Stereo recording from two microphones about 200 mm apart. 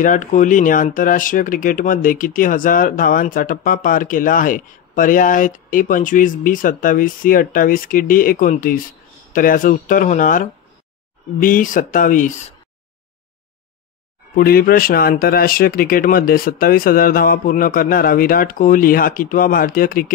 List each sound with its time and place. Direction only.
0.0 s speech: 40° left (ahead or behind)
14.3 s speech: 50° left (ahead or behind)